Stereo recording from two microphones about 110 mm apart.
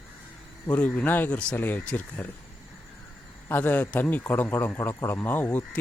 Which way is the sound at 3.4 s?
20° left (ahead or behind).